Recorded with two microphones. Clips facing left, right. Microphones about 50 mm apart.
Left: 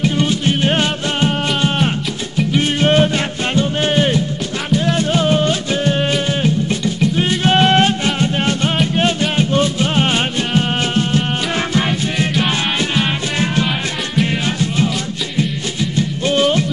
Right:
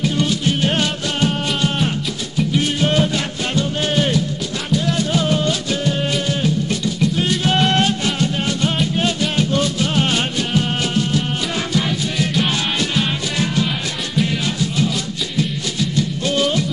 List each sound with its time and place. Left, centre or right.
0.2 s music: left
3.5 s music: left
16.0 s music: left